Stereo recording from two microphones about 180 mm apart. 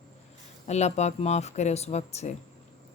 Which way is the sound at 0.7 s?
40° left (ahead or behind).